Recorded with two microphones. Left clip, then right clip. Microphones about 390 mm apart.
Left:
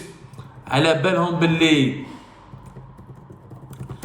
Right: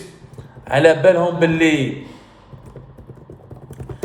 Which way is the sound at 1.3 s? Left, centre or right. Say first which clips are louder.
Right 3 dB; centre.